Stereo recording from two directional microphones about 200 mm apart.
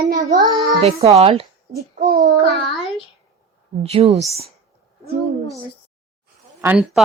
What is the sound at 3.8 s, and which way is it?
Speech, 30° right (ahead or behind).